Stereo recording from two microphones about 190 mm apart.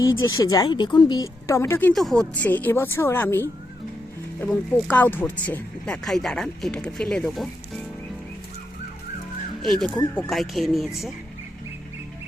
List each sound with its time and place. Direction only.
0.0 s a woman's voice: 20° left (ahead or behind)
1.9 s a woman's voice: centre (ahead or behind)
10.2 s speech: centre (ahead or behind)